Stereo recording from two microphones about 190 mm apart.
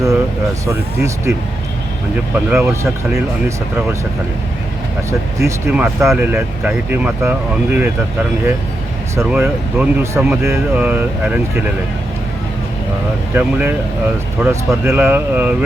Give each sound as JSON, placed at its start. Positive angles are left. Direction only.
{"t": 0.7, "sound": "speech", "side_deg": -15}
{"t": 2.3, "sound": "speech", "side_deg": -10}
{"t": 5.4, "sound": "speech", "side_deg": -15}
{"t": 9.1, "sound": "speech", "side_deg": -10}
{"t": 13.3, "sound": "speech", "side_deg": -10}